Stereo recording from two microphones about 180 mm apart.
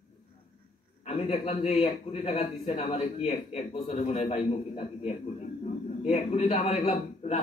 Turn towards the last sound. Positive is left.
turn(degrees=45)  # may be behind; listen again after turning